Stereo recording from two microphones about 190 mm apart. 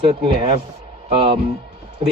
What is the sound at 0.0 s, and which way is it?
Speech, 30° right (ahead or behind).